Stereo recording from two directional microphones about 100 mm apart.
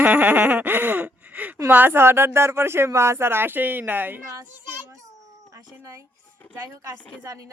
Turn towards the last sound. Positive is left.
turn(degrees=-35)  # may be behind; listen again after turning